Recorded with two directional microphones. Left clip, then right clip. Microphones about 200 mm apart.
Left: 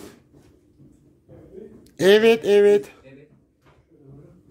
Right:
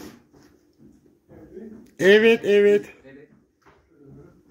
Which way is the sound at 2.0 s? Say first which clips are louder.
Even; 20° left (ahead or behind).